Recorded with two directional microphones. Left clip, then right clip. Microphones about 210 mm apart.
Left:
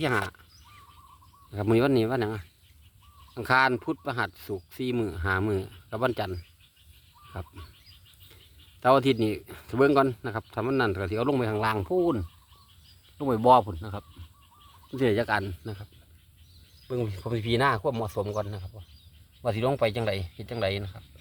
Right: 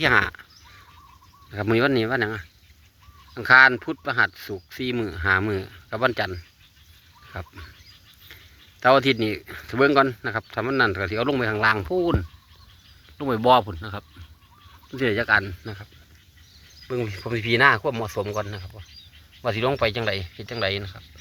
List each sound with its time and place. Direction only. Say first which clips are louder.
0.0 s speech: right 9 dB; 5° left (ahead or behind)
1.5 s speech: right 3 dB; 10° left (ahead or behind)
8.8 s speech: right 4 dB; 10° left (ahead or behind)
13.1 s speech: right 2 dB; 5° left (ahead or behind)
14.8 s speech: right 4 dB; 15° left (ahead or behind)
16.9 s speech: right 4 dB; 5° left (ahead or behind)